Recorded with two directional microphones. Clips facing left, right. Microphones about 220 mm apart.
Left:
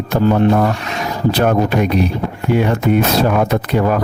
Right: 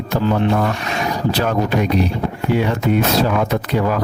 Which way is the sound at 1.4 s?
55° left (ahead or behind).